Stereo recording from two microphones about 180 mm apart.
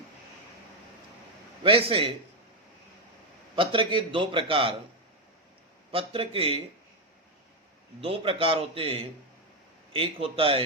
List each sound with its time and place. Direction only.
1.6 s a man's voice: 30° right (ahead or behind)
3.5 s a man's voice: 30° right (ahead or behind)
5.9 s a man's voice: 30° right (ahead or behind)
8.0 s a man's voice: 30° right (ahead or behind)